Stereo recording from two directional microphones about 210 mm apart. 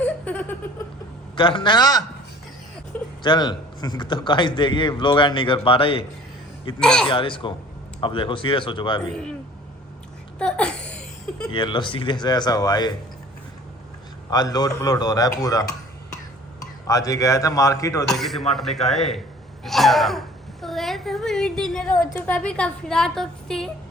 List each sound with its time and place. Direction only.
0.0 s a sound: 5° left (ahead or behind)
1.4 s a man's voice: 25° left (ahead or behind)
3.2 s a man's voice: 20° left (ahead or behind)
6.7 s a woman's voice: 5° left (ahead or behind)
7.1 s a man's voice: 25° left (ahead or behind)
10.3 s a sound: 5° left (ahead or behind)
11.4 s a man's voice: 20° left (ahead or behind)
14.3 s a man's voice: 20° left (ahead or behind)
18.1 s a woman's voice: centre (ahead or behind)
19.6 s a sound: centre (ahead or behind)
22.1 s a woman's voice: 5° left (ahead or behind)